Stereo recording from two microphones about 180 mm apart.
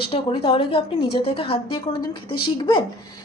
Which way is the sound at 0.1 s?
30° left (ahead or behind).